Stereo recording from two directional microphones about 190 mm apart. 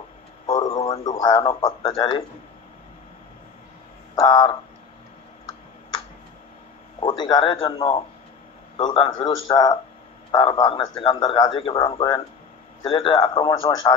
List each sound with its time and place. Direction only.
1.0 s speech: 20° left (ahead or behind)
1.5 s speech: 30° left (ahead or behind)
4.1 s speech: 20° left (ahead or behind)
7.0 s speech: 25° left (ahead or behind)